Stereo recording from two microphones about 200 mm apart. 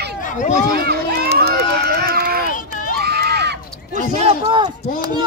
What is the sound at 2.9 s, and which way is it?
Crowd, 50° right (ahead or behind).